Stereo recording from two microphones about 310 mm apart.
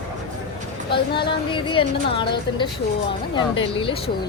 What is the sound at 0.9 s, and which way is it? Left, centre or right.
Speech, centre.